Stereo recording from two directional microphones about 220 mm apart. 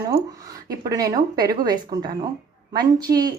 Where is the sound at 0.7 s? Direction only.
15° right (ahead or behind).